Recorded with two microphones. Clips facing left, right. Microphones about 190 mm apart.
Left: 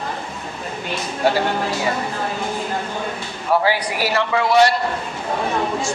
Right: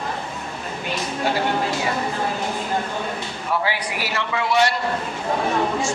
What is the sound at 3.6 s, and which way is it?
A man's voice, 35° left (ahead or behind).